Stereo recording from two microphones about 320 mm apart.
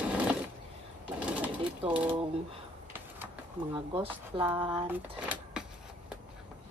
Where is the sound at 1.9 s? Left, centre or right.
Centre.